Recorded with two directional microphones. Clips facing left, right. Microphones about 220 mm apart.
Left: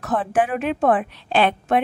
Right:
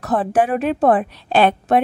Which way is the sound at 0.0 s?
35° right (ahead or behind).